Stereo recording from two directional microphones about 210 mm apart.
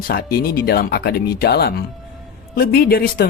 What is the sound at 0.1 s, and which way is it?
Speech, 45° left (ahead or behind).